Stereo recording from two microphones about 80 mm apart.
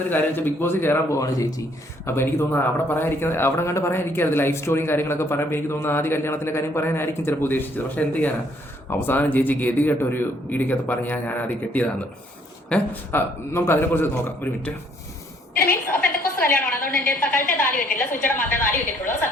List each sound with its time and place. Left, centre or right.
0.1 s a man's voice: left
1.2 s speech: left
2.0 s a man's voice: left; by 13.0 s centre
13.1 s a man's voice: left
15.9 s a sound: left
17.2 s a man's voice: left